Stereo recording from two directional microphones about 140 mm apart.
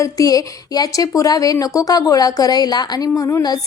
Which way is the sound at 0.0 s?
25° left (ahead or behind).